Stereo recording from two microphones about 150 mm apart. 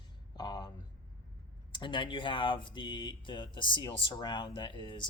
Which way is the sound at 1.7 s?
30° left (ahead or behind).